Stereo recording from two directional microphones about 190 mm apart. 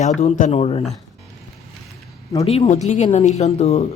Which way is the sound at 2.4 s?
30° left (ahead or behind).